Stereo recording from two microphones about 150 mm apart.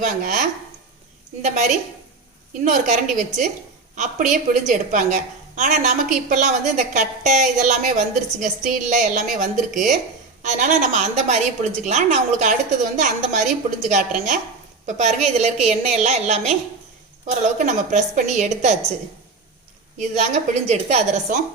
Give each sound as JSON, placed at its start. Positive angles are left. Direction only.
{"t": 0.0, "sound": "a woman's voice", "side_deg": -55}
{"t": 4.7, "sound": "a woman's voice", "side_deg": -55}
{"t": 20.0, "sound": "a woman's voice", "side_deg": -50}